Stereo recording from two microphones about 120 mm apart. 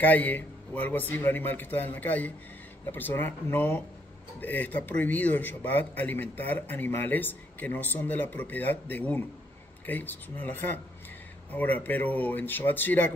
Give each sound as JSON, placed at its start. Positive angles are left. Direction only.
{"t": 0.0, "sound": "speech", "side_deg": 15}